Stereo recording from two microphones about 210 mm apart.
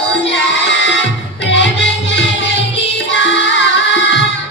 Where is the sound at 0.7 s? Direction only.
60° left (ahead or behind).